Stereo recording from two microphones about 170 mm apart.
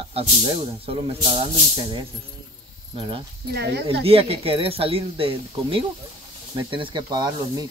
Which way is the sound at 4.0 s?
35° right (ahead or behind).